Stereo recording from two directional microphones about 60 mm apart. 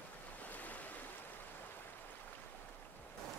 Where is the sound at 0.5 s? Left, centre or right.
Left.